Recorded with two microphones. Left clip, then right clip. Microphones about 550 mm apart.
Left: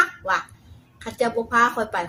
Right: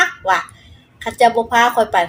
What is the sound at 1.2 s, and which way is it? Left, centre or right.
Speech, left.